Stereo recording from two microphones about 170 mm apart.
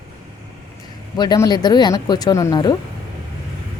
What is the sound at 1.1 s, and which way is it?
A woman's voice, 20° left (ahead or behind).